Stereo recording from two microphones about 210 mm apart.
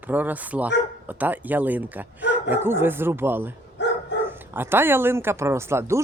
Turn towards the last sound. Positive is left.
turn(degrees=-10)  # may be behind; listen again after turning